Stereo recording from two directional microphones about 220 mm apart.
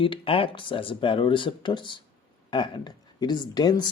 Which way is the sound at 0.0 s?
25° left (ahead or behind).